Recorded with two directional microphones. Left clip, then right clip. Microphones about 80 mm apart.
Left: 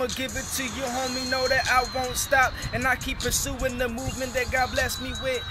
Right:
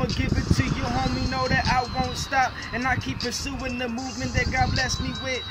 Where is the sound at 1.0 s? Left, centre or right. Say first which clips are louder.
Left 1 dB; left.